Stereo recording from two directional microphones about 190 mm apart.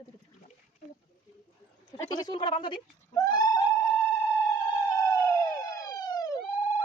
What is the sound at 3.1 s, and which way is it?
Goat, 20° left (ahead or behind).